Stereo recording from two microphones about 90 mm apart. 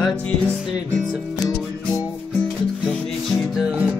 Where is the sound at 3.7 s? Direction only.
20° right (ahead or behind).